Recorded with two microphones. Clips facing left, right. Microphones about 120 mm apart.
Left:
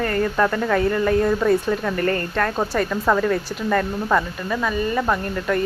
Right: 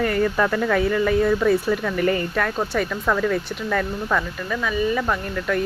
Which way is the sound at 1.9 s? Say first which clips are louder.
Right 3 dB; 15° right (ahead or behind).